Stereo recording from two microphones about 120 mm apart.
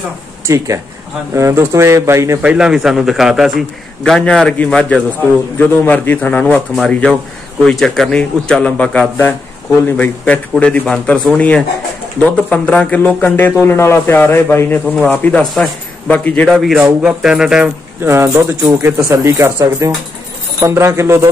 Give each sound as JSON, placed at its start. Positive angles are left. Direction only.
{"t": 0.5, "sound": "speech", "side_deg": -30}
{"t": 2.4, "sound": "a man's voice", "side_deg": -5}
{"t": 16.4, "sound": "a man's voice", "side_deg": -5}
{"t": 18.0, "sound": "speech", "side_deg": -25}